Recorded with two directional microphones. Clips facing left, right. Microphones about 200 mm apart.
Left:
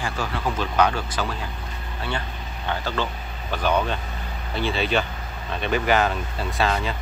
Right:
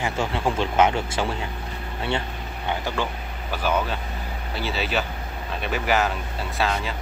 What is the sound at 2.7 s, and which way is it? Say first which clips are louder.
Speech: even; 15° right (ahead or behind).